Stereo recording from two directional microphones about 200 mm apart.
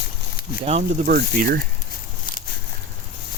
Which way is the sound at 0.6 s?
30° right (ahead or behind).